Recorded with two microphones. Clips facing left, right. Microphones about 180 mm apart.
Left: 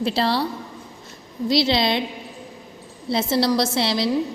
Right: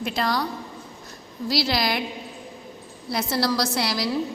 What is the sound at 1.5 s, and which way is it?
Speech, 20° left (ahead or behind).